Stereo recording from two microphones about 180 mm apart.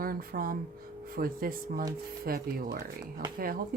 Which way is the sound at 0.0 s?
55° right (ahead or behind).